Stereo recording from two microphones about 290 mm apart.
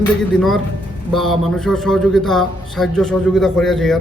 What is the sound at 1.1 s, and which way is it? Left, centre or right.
A man's voice, centre.